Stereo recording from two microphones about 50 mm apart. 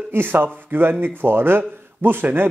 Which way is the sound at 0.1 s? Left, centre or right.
Right.